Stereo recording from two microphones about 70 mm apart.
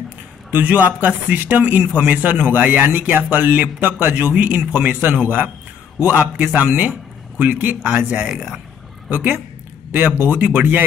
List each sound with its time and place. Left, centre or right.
0.5 s speech: right
8.3 s speech: centre
9.1 s speech: right